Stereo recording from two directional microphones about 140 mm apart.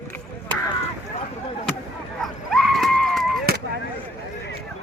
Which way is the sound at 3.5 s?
90° right.